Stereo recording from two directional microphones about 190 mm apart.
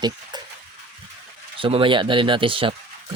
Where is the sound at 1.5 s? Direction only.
30° right (ahead or behind).